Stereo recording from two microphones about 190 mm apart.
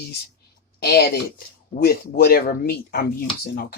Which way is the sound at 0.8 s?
55° left (ahead or behind).